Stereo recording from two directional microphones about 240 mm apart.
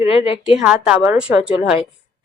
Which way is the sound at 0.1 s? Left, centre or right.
Left.